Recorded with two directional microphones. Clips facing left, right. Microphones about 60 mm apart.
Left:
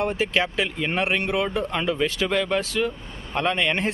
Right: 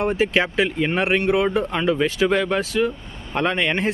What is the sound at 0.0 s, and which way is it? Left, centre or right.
Speech, centre.